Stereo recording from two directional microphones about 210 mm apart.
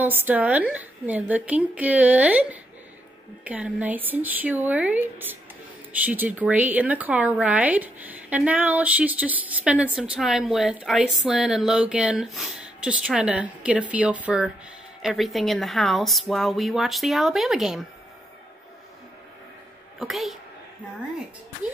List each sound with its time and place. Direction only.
0.0 s a woman's voice: 10° right (ahead or behind)
20.0 s a woman's voice: centre (ahead or behind)